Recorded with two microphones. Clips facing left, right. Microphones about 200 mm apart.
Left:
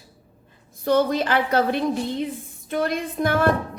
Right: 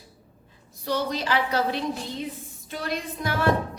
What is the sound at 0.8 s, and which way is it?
A woman's voice, 55° left (ahead or behind).